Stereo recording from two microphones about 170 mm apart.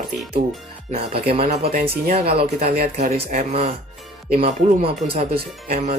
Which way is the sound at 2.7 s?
65° right (ahead or behind).